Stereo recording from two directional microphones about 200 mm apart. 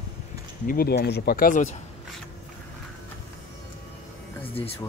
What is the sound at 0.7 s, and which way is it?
Speech, 50° left (ahead or behind).